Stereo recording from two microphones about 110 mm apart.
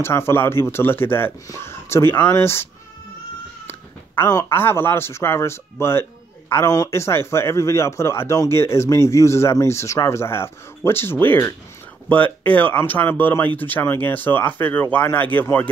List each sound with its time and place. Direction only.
0.0 s speech: 20° left (ahead or behind)